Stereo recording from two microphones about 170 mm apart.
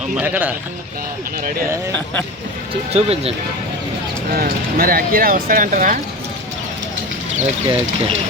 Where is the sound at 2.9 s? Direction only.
35° right (ahead or behind).